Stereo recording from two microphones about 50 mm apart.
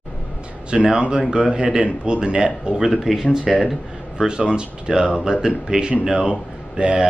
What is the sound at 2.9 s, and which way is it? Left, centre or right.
A man's voice, centre.